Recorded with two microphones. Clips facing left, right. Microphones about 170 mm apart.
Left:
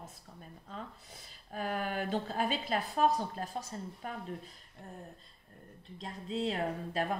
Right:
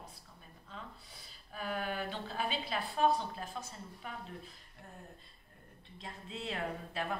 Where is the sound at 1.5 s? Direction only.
45° left (ahead or behind).